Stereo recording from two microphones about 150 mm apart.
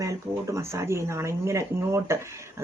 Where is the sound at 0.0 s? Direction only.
20° right (ahead or behind).